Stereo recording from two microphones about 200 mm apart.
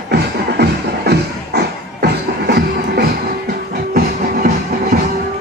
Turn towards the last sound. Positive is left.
turn(degrees=-50)  # may be behind; listen again after turning